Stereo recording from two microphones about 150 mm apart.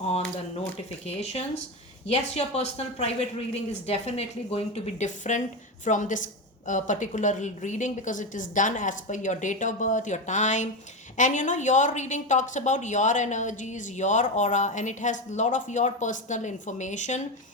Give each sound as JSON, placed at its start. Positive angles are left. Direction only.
{"t": 1.0, "sound": "a woman's voice", "side_deg": 45}